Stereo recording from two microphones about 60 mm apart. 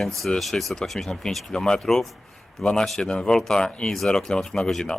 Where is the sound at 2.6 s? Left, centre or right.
Centre.